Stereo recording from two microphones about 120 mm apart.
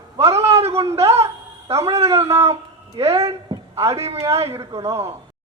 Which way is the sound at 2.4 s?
55° right (ahead or behind).